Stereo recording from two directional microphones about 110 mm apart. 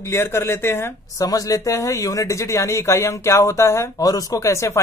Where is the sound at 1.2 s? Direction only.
30° left (ahead or behind).